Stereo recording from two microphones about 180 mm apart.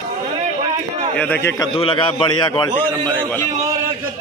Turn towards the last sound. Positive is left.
turn(degrees=10)  # may be behind; listen again after turning